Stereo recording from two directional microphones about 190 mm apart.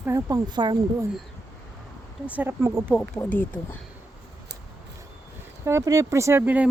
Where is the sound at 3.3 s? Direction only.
10° left (ahead or behind).